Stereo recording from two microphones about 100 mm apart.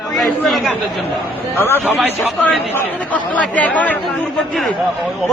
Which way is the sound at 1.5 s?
20° left (ahead or behind).